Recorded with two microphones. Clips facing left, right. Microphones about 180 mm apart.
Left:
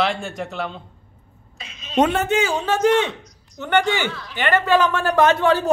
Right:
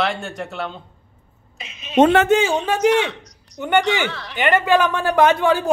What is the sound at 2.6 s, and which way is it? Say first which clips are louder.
Speech: even; 15° right (ahead or behind).